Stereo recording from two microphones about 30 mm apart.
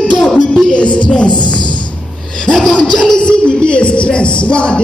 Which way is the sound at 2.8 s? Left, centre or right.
Left.